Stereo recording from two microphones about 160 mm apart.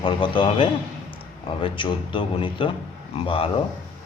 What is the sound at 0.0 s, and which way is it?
A man's voice, 30° left (ahead or behind).